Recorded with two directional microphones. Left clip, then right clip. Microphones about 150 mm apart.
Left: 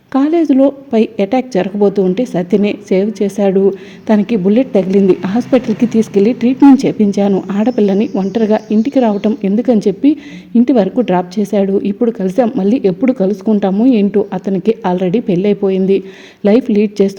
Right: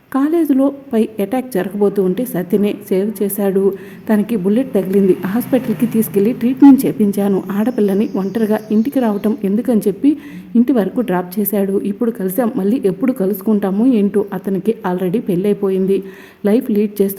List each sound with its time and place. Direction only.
0.1 s a woman's voice: 30° left (ahead or behind)